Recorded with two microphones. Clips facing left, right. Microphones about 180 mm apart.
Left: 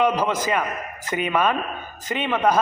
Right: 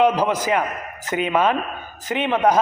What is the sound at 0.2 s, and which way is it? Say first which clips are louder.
A man's voice: right 2 dB; 15° right (ahead or behind).